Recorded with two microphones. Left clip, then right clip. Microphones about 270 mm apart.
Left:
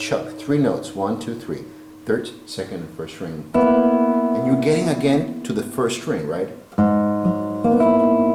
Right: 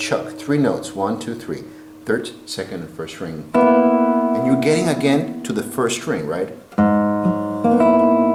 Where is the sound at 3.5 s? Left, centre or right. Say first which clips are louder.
Right 2 dB; centre.